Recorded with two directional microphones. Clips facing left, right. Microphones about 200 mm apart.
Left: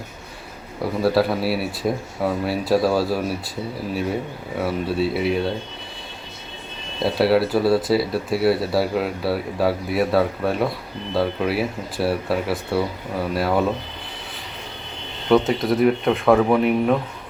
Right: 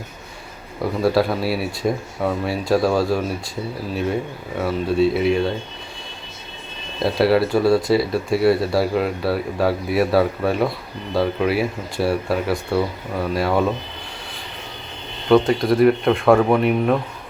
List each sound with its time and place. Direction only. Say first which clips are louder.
1.0 s speech: even; centre (ahead or behind)
4.5 s speech: right 3 dB; 5° left (ahead or behind)
7.0 s speech: right 1 dB; centre (ahead or behind)
15.3 s speech: right 2 dB; centre (ahead or behind)